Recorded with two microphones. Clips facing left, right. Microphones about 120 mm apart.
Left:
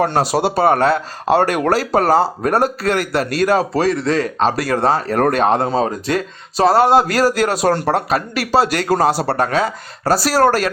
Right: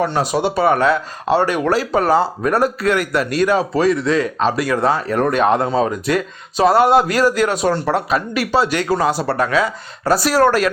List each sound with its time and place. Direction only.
0.3 s speech: 35° left (ahead or behind)